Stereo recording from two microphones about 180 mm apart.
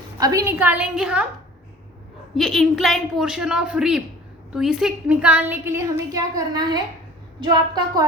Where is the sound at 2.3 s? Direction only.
Centre (ahead or behind).